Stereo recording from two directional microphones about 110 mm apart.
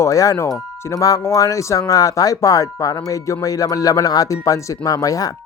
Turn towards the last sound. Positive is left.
turn(degrees=30)  # may be behind; listen again after turning